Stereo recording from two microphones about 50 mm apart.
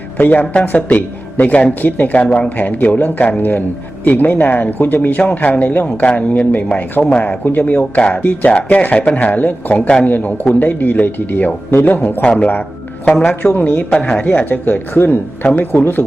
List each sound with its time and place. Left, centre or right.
0.2 s a man's voice: left
6.1 s a man's voice: left
9.8 s a woman's voice: left
10.1 s a man's voice: left
12.2 s a woman's voice: centre
13.5 s a man's voice: left
13.9 s a woman's voice: centre
14.3 s a man's voice: left